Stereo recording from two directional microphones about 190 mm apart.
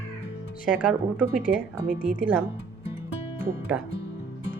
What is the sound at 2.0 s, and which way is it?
Speech, 10° right (ahead or behind).